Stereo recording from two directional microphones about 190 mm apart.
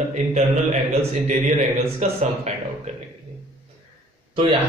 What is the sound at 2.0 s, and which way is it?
Speech, 35° right (ahead or behind).